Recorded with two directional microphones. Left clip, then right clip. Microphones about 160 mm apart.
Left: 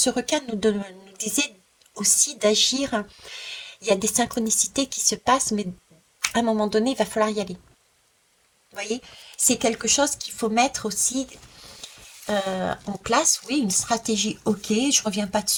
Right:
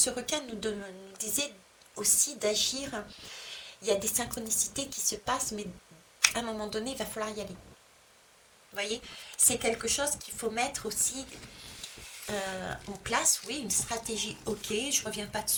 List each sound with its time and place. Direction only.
0.0 s speech: 40° left (ahead or behind)
8.7 s speech: 40° left (ahead or behind)
12.3 s speech: 40° left (ahead or behind)